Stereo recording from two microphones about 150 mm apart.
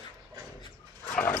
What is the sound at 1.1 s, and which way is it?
Dog, 15° left (ahead or behind).